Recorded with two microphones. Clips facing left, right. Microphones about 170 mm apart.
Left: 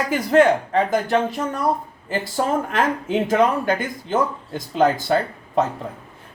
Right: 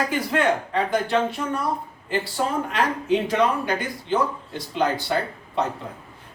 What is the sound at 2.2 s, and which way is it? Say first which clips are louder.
Speech: left 3 dB; 45° left (ahead or behind).